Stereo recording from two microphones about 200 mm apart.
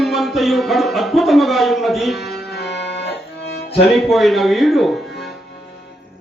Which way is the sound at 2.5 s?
55° left (ahead or behind).